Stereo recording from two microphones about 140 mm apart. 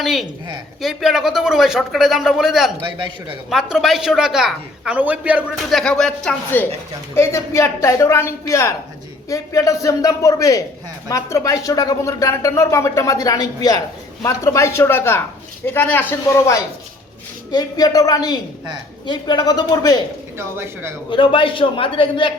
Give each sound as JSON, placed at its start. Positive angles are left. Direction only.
{"t": 0.0, "sound": "speech", "side_deg": 0}
{"t": 2.8, "sound": "a man's voice", "side_deg": -35}
{"t": 3.5, "sound": "speech", "side_deg": -5}
{"t": 7.2, "sound": "speech", "side_deg": 20}
{"t": 20.4, "sound": "a man's voice", "side_deg": -15}
{"t": 21.1, "sound": "a man's voice", "side_deg": 35}